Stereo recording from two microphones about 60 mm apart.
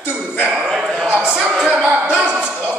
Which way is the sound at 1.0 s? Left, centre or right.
Centre.